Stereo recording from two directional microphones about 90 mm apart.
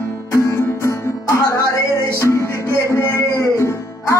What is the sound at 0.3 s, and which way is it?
Music, 30° left (ahead or behind).